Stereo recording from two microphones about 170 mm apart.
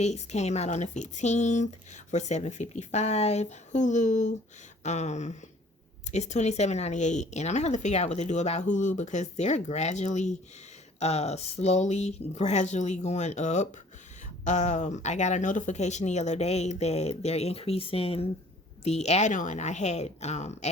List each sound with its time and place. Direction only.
0.0 s speech: 40° left (ahead or behind)